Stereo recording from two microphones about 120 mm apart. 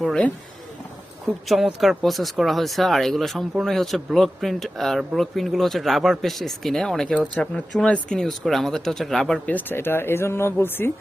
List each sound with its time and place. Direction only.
0.0 s speech: 5° left (ahead or behind)
1.5 s speech: centre (ahead or behind)
9.5 s speech: 15° left (ahead or behind)